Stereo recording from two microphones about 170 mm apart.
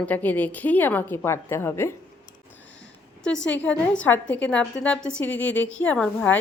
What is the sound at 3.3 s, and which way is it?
Speech, 90° left.